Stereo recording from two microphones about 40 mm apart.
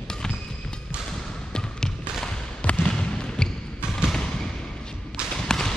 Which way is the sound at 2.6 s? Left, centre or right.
Left.